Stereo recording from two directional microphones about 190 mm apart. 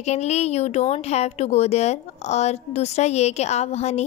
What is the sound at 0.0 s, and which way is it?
A woman's voice, 35° left (ahead or behind).